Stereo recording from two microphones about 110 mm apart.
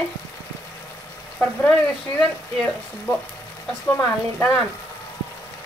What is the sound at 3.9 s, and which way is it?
Speech, 15° left (ahead or behind).